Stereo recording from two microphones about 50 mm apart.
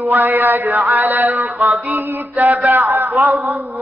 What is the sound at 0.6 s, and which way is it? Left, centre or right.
Mantra, right.